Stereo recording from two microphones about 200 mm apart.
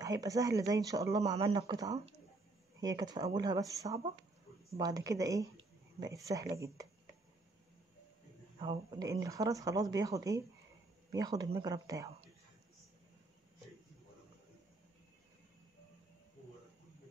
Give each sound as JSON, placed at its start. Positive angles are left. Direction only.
{"t": 0.0, "sound": "speech", "side_deg": -15}
{"t": 3.0, "sound": "speech", "side_deg": -20}
{"t": 8.5, "sound": "speech", "side_deg": -20}